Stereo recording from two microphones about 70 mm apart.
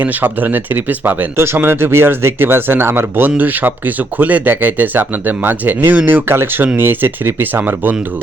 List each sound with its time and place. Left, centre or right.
0.0 s speech: right